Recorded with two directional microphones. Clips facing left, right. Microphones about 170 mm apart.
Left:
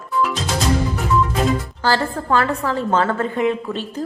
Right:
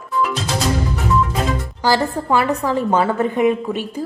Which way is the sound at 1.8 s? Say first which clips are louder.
Right 4 dB; 15° right (ahead or behind).